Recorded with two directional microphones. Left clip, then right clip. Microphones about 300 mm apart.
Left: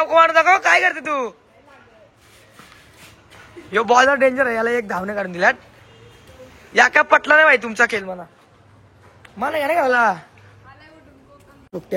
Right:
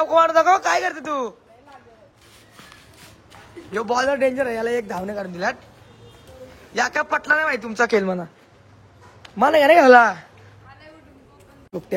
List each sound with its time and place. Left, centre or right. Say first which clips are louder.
0.0 s speech: left 2 dB; centre
3.7 s speech: left 7 dB; centre
6.7 s speech: left 8 dB; centre
9.4 s speech: right 6 dB; centre
10.7 s a sound: even; centre